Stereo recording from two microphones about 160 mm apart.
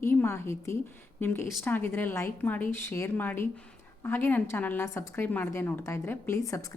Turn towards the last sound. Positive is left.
turn(degrees=20)  # may be behind; listen again after turning